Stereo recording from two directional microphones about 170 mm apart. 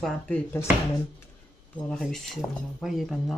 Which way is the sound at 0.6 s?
15° left (ahead or behind).